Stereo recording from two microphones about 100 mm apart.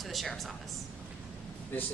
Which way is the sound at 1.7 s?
15° left (ahead or behind).